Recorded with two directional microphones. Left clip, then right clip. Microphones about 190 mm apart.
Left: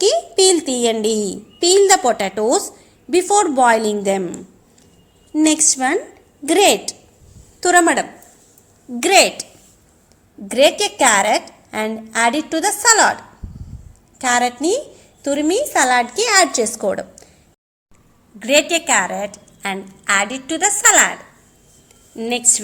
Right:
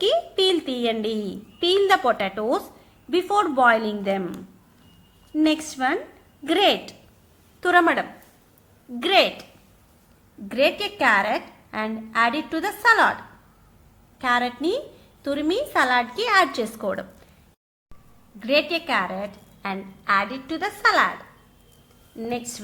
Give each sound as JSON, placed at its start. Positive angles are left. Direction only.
{"t": 0.0, "sound": "a woman's voice", "side_deg": 15}
{"t": 10.5, "sound": "a woman's voice", "side_deg": 20}
{"t": 14.2, "sound": "a woman's voice", "side_deg": 20}
{"t": 18.3, "sound": "a woman's voice", "side_deg": 15}
{"t": 22.2, "sound": "a woman's voice", "side_deg": 20}